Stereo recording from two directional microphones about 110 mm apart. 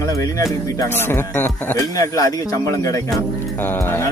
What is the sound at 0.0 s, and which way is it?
Speech, 30° left (ahead or behind).